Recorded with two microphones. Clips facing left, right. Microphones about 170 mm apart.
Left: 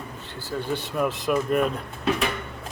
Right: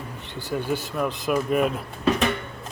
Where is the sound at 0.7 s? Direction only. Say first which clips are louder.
Left 2 dB; centre (ahead or behind).